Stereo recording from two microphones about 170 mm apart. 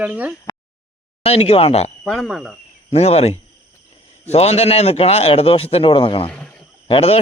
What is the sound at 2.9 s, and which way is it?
A man's voice, 40° left (ahead or behind).